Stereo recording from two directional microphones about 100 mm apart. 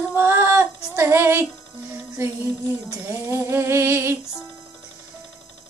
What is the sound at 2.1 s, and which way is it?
Music, 30° right (ahead or behind).